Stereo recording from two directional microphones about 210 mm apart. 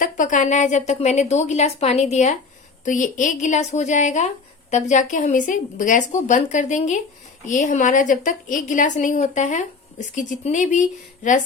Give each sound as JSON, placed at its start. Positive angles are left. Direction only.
{"t": 0.0, "sound": "a woman's voice", "side_deg": 40}